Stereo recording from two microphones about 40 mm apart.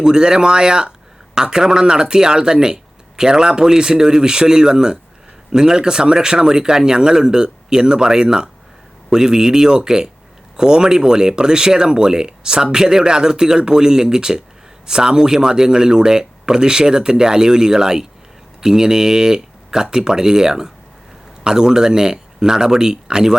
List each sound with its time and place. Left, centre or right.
0.0 s speech: centre